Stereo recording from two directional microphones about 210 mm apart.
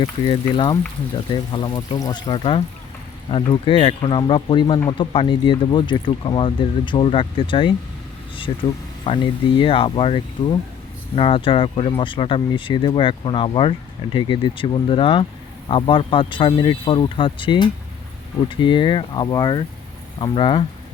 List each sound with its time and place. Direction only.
0.4 s speech: 20° left (ahead or behind)